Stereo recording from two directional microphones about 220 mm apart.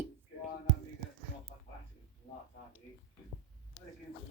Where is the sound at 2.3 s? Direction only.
30° left (ahead or behind).